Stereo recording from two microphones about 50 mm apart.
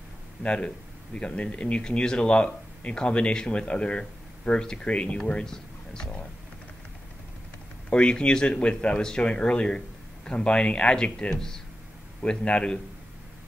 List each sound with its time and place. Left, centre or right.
0.4 s speech: centre
7.9 s speech: centre
12.2 s speech: left